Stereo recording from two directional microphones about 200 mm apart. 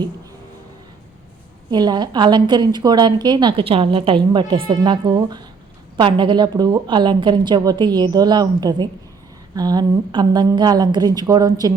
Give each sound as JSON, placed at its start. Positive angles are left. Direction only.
{"t": 1.7, "sound": "a woman's voice", "side_deg": -20}